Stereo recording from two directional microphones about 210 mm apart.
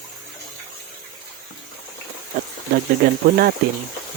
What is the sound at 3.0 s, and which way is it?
Speech, 45° right (ahead or behind).